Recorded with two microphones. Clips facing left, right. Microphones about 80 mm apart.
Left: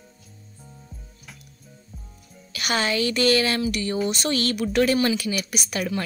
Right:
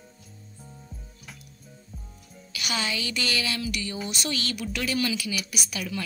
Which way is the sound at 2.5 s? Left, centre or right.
Left.